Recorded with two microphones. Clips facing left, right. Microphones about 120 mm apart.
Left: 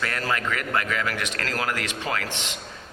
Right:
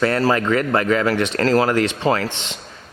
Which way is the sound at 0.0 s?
35° right (ahead or behind).